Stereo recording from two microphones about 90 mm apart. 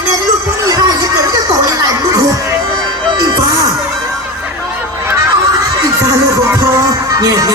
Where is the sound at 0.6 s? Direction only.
45° right (ahead or behind).